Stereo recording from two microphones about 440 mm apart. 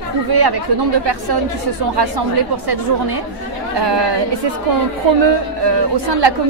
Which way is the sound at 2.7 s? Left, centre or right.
Right.